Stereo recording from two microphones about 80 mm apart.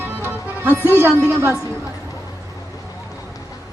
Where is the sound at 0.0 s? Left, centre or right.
Right.